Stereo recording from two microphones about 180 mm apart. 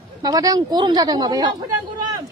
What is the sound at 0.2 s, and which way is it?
Speech, 20° right (ahead or behind).